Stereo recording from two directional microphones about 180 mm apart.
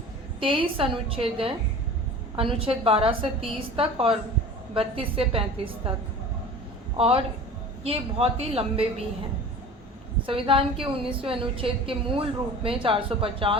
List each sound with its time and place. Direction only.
0.3 s a woman's voice: 30° right (ahead or behind)
6.9 s a woman's voice: 35° right (ahead or behind)
10.2 s a woman's voice: 30° right (ahead or behind)